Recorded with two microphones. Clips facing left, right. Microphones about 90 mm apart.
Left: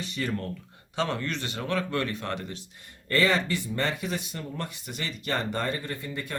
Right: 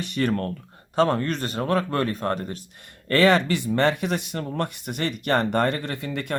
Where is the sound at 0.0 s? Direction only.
60° right (ahead or behind).